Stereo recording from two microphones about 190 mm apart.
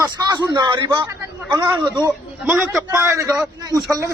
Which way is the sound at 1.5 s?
10° right (ahead or behind).